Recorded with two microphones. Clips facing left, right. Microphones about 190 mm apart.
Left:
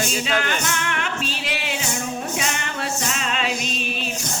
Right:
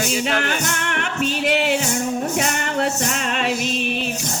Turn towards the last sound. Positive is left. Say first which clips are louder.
# right 3 dB
turn(degrees=-55)  # may be behind; listen again after turning